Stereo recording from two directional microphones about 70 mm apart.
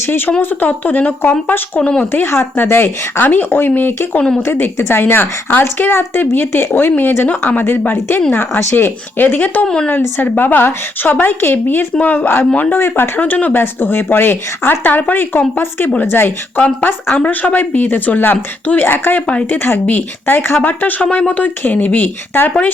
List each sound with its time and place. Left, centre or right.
0.0 s a woman's voice: left
1.8 s a woman's voice: centre
2.1 s a woman's voice: left
9.6 s a woman's voice: centre
9.9 s a woman's voice: left
17.2 s speech: left